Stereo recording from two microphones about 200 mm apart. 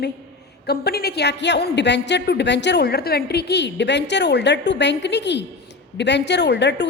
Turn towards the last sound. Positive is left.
turn(degrees=60)  # may be behind; listen again after turning